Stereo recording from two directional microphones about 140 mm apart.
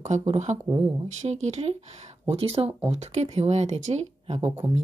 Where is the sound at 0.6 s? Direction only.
25° right (ahead or behind).